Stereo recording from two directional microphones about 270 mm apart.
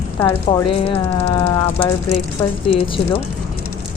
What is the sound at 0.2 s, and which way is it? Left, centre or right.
Speech, centre.